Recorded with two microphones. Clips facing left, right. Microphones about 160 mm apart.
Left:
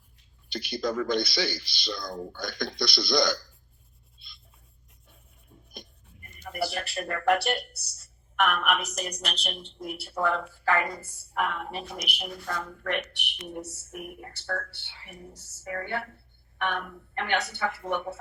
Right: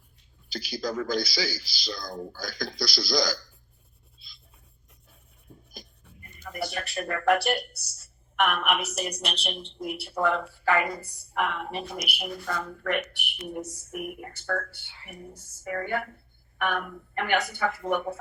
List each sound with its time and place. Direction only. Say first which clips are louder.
0.5 s speech: left 2 dB; centre (ahead or behind)
5.5 s a sound: right 4 dB; 90° right
6.5 s a sound: even; 35° left (ahead or behind)
6.8 s speech: right 3 dB; 30° left (ahead or behind)
8.5 s a woman's voice: right 1 dB; 5° right (ahead or behind)
11.3 s a woman's voice: right 1 dB; centre (ahead or behind)